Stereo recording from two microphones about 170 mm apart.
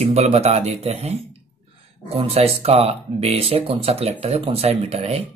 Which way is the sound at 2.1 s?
35° right (ahead or behind).